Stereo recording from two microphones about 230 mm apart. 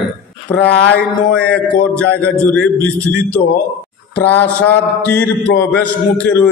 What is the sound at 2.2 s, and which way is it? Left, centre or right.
Speech, centre.